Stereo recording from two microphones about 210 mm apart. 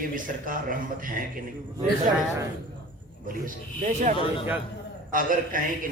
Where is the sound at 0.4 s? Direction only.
40° right (ahead or behind).